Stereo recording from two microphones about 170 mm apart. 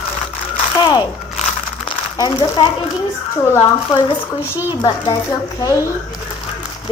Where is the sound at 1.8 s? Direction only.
25° left (ahead or behind).